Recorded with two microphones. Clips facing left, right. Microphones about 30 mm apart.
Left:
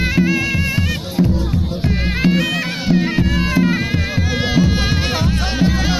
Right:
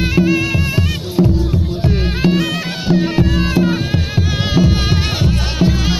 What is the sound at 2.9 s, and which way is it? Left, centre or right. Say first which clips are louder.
Music: right 1 dB; right.